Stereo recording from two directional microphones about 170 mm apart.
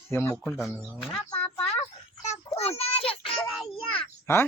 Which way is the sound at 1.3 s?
10° left (ahead or behind).